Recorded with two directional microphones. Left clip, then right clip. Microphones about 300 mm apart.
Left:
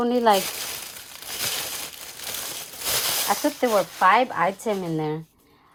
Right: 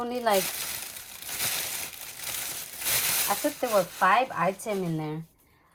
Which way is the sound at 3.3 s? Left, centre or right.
Left.